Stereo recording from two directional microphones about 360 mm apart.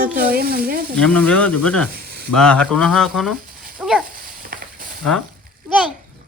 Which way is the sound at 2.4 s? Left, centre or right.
Centre.